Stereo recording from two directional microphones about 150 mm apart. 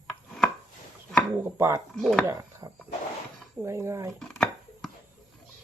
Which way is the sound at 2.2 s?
20° right (ahead or behind).